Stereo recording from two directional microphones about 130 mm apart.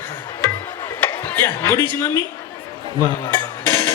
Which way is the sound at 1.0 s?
15° left (ahead or behind).